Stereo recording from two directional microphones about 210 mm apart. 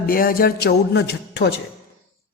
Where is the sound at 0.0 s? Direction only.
45° left (ahead or behind).